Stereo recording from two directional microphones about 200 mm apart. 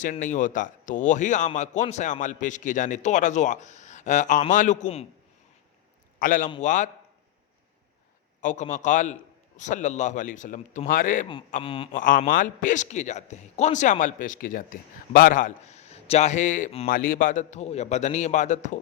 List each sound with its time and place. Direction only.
0.0 s a man's voice: 40° left (ahead or behind)
6.1 s a man's voice: 40° left (ahead or behind)
8.4 s a man's voice: 40° left (ahead or behind)
11.6 s a sound: 25° left (ahead or behind)
11.9 s a man's voice: 45° left (ahead or behind)